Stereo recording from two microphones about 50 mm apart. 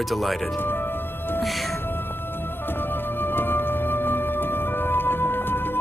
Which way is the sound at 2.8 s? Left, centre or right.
Left.